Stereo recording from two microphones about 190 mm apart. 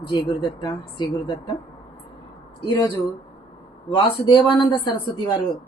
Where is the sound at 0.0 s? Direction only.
25° left (ahead or behind).